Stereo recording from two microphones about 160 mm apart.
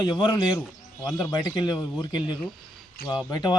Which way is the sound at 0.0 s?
25° left (ahead or behind).